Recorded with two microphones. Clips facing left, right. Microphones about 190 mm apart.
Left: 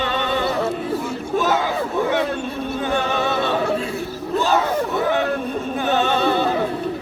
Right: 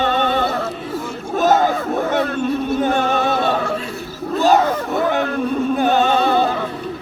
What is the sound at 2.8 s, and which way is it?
Music, 50° right (ahead or behind).